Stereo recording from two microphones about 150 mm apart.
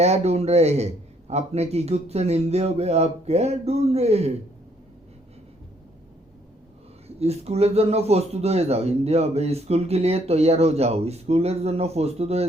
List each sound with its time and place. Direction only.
0.0 s speech: 45° right (ahead or behind)
7.2 s speech: 45° right (ahead or behind)